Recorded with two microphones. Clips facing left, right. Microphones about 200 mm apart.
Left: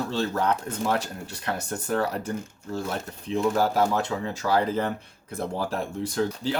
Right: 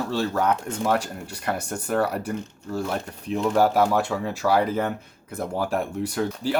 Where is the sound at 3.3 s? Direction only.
10° right (ahead or behind).